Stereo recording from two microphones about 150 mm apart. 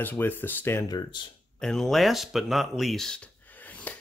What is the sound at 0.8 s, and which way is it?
Speech, 30° left (ahead or behind).